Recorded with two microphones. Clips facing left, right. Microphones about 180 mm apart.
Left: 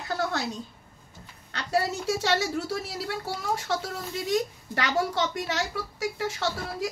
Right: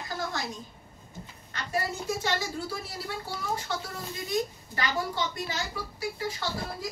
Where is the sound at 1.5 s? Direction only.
75° left (ahead or behind).